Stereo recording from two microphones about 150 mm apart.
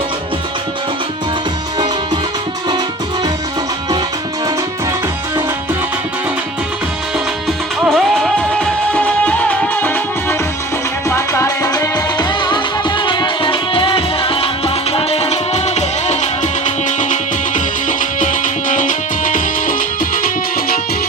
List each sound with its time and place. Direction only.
7.9 s music: centre (ahead or behind); by 19.7 s 60° left (ahead or behind)